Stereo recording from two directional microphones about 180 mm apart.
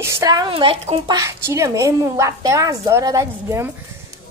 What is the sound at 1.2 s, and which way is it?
A woman's voice, 15° right (ahead or behind).